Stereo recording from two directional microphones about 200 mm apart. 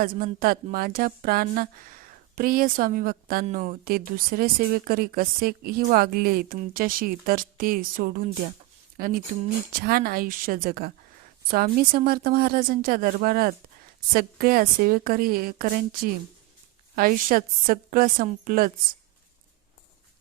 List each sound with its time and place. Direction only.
0.0 s speech: 45° right (ahead or behind)